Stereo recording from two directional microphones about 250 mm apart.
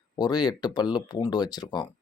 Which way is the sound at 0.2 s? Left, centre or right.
Centre.